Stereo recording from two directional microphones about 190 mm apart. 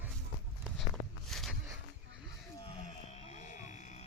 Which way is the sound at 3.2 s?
40° left (ahead or behind).